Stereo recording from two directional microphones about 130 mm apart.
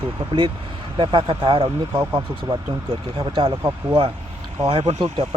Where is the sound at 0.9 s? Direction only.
40° right (ahead or behind).